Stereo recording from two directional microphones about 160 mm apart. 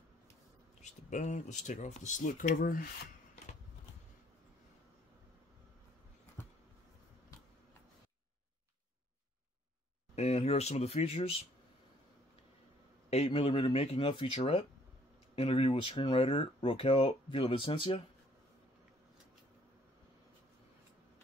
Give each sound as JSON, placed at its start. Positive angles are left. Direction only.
{"t": 1.1, "sound": "speech", "side_deg": 50}
{"t": 10.1, "sound": "speech", "side_deg": 40}
{"t": 13.1, "sound": "speech", "side_deg": 40}